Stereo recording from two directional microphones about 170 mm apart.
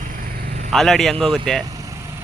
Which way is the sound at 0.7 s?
Centre (ahead or behind).